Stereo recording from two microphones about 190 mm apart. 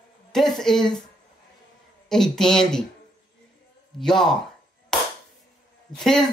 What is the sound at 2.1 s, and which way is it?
Speech, centre (ahead or behind).